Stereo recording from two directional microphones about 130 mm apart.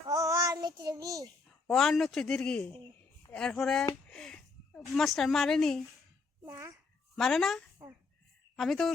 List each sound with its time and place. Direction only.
0.1 s child singing: 25° right (ahead or behind)
1.6 s speech: centre (ahead or behind)
4.1 s a sound: 5° left (ahead or behind)
6.5 s a child's voice: 25° right (ahead or behind)
7.2 s speech: centre (ahead or behind)